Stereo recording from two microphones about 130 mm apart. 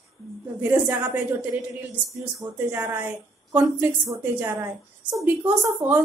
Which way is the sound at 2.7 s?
15° right (ahead or behind).